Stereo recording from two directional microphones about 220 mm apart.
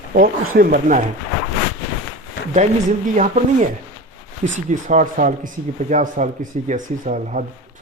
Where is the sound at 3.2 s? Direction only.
35° right (ahead or behind).